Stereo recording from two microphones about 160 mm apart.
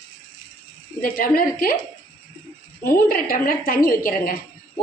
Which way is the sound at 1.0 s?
65° left (ahead or behind).